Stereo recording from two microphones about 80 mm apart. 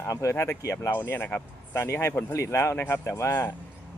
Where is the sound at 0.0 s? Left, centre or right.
Left.